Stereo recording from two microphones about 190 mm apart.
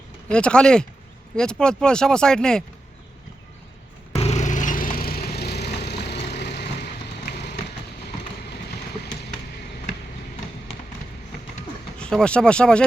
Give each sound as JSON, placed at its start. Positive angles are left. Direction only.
{"t": 0.3, "sound": "speech", "side_deg": 5}
{"t": 4.1, "sound": "splinter", "side_deg": 35}
{"t": 7.3, "sound": "vehicle", "side_deg": 60}
{"t": 11.9, "sound": "speech", "side_deg": 5}